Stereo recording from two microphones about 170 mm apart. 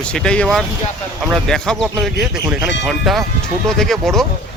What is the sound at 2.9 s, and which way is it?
Speech, centre (ahead or behind).